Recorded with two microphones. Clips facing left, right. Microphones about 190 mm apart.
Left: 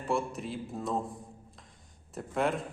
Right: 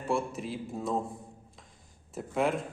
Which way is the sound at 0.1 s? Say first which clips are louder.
Right 1 dB; centre (ahead or behind).